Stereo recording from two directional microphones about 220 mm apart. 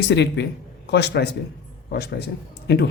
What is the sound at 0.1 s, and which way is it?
A man's voice, 50° left (ahead or behind).